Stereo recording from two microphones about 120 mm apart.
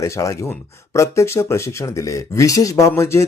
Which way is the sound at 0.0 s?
25° left (ahead or behind).